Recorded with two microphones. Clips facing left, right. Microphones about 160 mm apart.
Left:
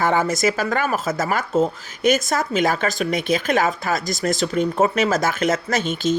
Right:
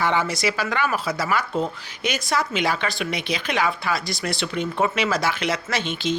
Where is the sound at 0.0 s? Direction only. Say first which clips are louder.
Left 4 dB; 45° left (ahead or behind).